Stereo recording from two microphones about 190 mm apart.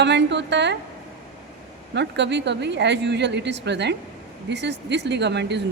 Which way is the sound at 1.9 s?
65° right (ahead or behind).